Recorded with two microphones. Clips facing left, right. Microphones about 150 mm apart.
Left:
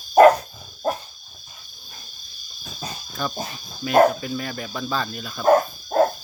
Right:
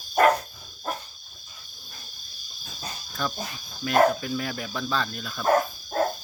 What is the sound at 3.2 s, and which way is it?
Speech, 5° left (ahead or behind).